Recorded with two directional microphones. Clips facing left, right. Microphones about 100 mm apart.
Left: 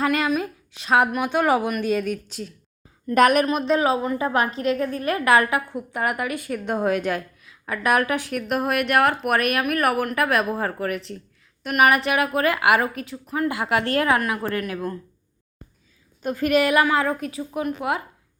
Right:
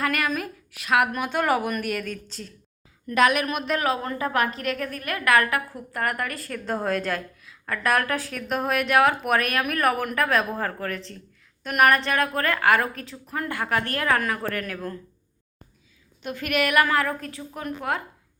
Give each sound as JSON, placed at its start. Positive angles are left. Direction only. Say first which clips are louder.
{"t": 0.0, "sound": "speech", "louder": "left 4 dB", "side_deg": 25}
{"t": 1.1, "sound": "a woman's voice", "louder": "left 3 dB", "side_deg": 15}
{"t": 3.2, "sound": "a woman's voice", "louder": "left 4 dB", "side_deg": 45}
{"t": 3.4, "sound": "a woman's voice", "louder": "left 5 dB", "side_deg": 25}
{"t": 13.5, "sound": "a woman's voice", "louder": "left 2 dB", "side_deg": 15}
{"t": 14.2, "sound": "a woman's voice", "louder": "left 2 dB", "side_deg": 10}
{"t": 16.2, "sound": "a woman's voice", "louder": "left 6 dB", "side_deg": 35}